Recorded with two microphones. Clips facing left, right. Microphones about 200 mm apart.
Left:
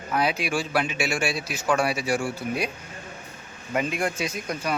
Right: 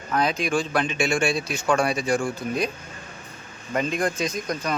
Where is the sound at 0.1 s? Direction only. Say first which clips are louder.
Right 2 dB; 10° left (ahead or behind).